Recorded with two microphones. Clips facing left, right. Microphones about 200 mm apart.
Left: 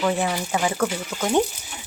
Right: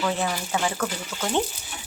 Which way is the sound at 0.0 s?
15° left (ahead or behind).